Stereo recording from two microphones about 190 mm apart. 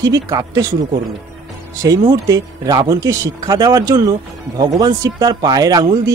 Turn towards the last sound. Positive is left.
turn(degrees=-20)  # may be behind; listen again after turning